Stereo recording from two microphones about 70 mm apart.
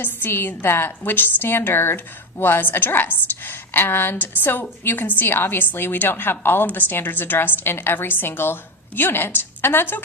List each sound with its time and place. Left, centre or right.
0.0 s a woman's voice: left